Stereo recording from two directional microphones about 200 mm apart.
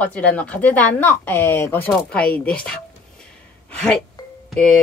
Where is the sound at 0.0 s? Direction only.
5° left (ahead or behind).